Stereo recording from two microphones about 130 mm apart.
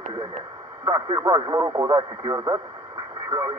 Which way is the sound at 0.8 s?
25° right (ahead or behind).